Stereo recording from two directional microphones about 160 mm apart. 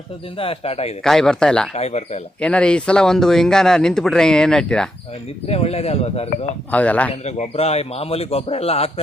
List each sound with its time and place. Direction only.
0.3 s a man's voice: 35° left (ahead or behind)
1.0 s speech: 5° left (ahead or behind)
1.7 s speech: 45° left (ahead or behind)
2.4 s speech: 5° left (ahead or behind)
5.5 s a man's voice: 40° left (ahead or behind)
6.7 s speech: 10° left (ahead or behind)
7.1 s a man's voice: 40° left (ahead or behind)